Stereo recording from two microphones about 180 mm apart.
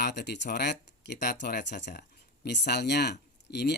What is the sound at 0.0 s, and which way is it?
Speech, 70° left (ahead or behind).